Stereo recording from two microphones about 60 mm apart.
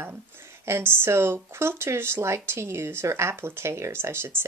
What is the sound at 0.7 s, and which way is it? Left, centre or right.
Speech, right.